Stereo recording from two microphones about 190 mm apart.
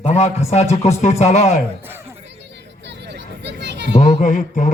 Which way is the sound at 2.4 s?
65° right (ahead or behind).